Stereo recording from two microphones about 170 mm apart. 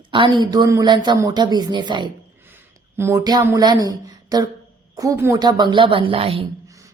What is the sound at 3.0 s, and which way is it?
Speech, 15° right (ahead or behind).